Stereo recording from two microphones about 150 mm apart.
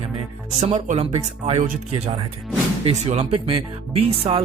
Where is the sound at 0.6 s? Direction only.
45° right (ahead or behind).